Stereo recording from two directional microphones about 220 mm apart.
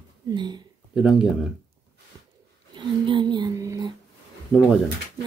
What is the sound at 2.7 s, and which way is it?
Roaring cats, 20° right (ahead or behind).